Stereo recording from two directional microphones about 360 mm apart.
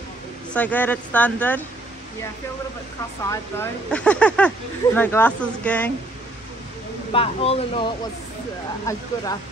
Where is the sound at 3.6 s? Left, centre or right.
Centre.